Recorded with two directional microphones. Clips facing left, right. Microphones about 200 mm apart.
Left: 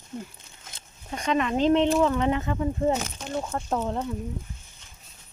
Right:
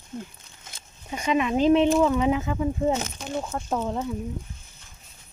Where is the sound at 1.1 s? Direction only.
5° right (ahead or behind).